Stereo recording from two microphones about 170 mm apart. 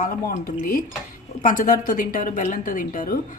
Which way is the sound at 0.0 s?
55° left (ahead or behind).